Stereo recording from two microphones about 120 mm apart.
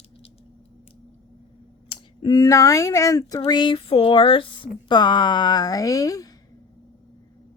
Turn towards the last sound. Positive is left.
turn(degrees=30)  # may be behind; listen again after turning